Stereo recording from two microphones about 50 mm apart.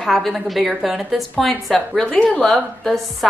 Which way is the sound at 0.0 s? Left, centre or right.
Centre.